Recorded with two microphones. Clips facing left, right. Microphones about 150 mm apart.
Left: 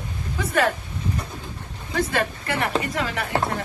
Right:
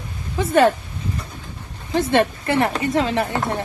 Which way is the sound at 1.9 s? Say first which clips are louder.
Right 6 dB; 25° right (ahead or behind).